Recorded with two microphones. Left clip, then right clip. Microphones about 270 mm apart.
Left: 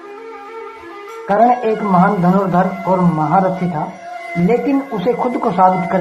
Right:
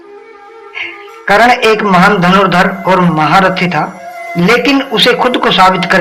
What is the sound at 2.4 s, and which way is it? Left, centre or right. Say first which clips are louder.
Speech: right 7 dB; right.